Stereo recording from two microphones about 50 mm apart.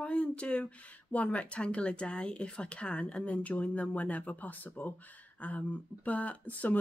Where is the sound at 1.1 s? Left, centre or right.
Left.